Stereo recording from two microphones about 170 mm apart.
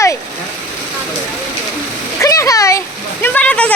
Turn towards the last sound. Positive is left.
turn(degrees=5)  # may be behind; listen again after turning